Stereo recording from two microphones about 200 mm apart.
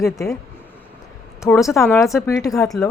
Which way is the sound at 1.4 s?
15° left (ahead or behind).